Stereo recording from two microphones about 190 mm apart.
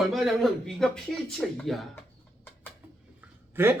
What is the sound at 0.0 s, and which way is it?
Speech, centre (ahead or behind).